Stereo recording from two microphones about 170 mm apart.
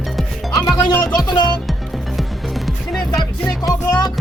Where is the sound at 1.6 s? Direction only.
Centre (ahead or behind).